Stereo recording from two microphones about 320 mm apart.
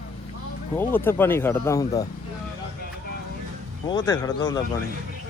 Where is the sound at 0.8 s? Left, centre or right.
Centre.